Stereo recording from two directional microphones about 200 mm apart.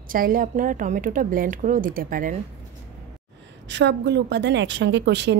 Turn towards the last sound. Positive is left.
turn(degrees=-60)  # may be behind; listen again after turning